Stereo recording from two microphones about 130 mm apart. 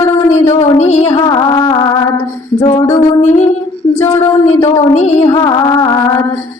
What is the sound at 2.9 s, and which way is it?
Music, 60° left (ahead or behind).